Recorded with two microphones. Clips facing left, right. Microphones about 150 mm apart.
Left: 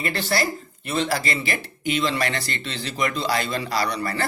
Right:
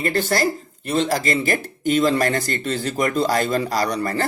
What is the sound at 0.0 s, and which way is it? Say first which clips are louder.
Speech: right 4 dB; 45° right (ahead or behind).